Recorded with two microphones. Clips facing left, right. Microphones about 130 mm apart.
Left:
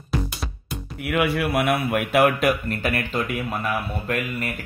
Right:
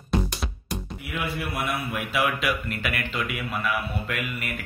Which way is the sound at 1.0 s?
70° left (ahead or behind).